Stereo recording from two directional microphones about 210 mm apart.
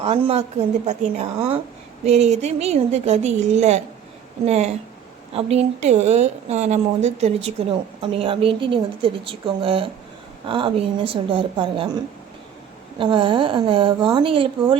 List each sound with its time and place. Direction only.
0.0 s a woman's voice: 30° right (ahead or behind)
13.0 s a woman's voice: 25° right (ahead or behind)